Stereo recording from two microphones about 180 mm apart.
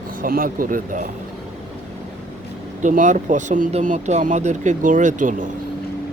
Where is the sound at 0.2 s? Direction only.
50° right (ahead or behind).